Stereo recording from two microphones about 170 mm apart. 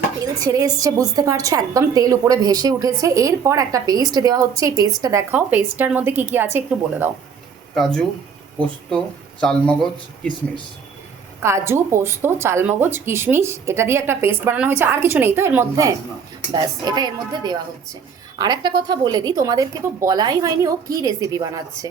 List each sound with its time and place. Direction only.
0.3 s a woman's voice: 20° right (ahead or behind)
5.3 s a woman's voice: 10° right (ahead or behind)
7.8 s a man's voice: 5° left (ahead or behind)
9.4 s a man's voice: 5° left (ahead or behind)
11.4 s a woman's voice: 15° right (ahead or behind)